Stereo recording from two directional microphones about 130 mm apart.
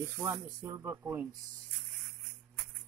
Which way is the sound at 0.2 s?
25° right (ahead or behind).